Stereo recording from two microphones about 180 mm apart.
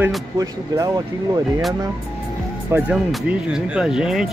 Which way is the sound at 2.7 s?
5° right (ahead or behind).